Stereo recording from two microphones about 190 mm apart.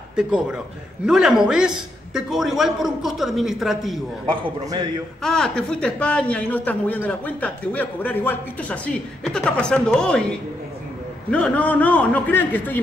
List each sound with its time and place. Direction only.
0.1 s a man's voice: 5° right (ahead or behind)
4.3 s a man's voice: 25° right (ahead or behind)
5.2 s speech: 5° left (ahead or behind)